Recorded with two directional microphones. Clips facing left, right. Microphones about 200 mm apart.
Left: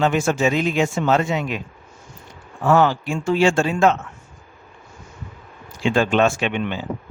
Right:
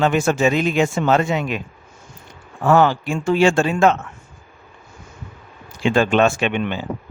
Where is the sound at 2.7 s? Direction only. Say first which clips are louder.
Right 1 dB; 55° right (ahead or behind).